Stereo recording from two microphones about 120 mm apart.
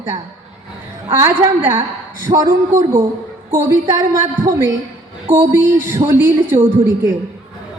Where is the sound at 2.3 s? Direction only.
45° right (ahead or behind).